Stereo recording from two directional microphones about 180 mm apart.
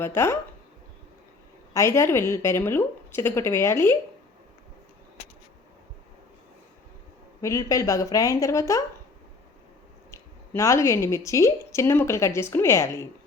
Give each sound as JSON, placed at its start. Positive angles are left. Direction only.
{"t": 0.0, "sound": "a woman's voice", "side_deg": 15}
{"t": 1.7, "sound": "a woman's voice", "side_deg": 15}
{"t": 7.4, "sound": "a woman's voice", "side_deg": 15}
{"t": 10.1, "sound": "a woman's voice", "side_deg": 15}